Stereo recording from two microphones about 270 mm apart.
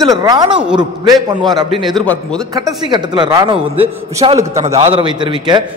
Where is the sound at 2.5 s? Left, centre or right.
Centre.